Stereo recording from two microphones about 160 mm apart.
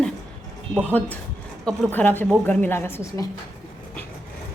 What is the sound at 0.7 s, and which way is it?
Speech, 15° right (ahead or behind).